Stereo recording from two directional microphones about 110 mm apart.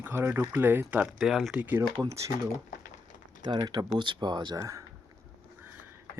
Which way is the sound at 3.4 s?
40° right (ahead or behind).